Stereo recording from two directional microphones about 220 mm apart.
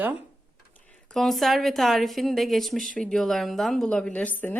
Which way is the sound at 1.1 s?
Centre (ahead or behind).